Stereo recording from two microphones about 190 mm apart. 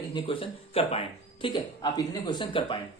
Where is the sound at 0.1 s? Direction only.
25° left (ahead or behind).